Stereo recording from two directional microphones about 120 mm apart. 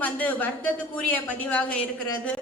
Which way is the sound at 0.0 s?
15° left (ahead or behind).